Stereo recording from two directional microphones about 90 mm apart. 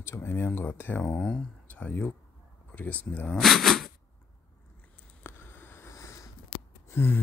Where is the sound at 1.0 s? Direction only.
5° left (ahead or behind).